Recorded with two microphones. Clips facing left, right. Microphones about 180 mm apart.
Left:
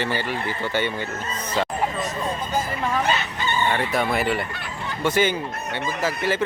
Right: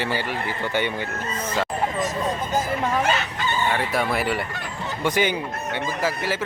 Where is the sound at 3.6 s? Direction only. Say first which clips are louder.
Left 1 dB; 5° right (ahead or behind).